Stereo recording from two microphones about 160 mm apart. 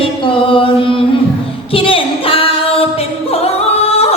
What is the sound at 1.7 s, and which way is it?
Singing, 35° left (ahead or behind).